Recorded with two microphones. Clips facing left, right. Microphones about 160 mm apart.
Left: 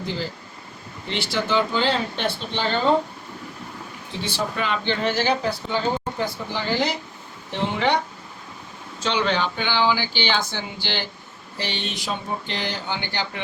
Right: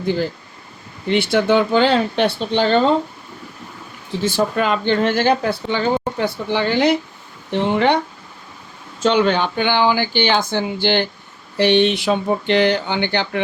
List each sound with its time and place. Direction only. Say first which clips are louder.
1.0 s speech: right 10 dB; 55° right (ahead or behind)
4.2 s speech: right 8 dB; 45° right (ahead or behind)
9.0 s speech: right 7 dB; 50° right (ahead or behind)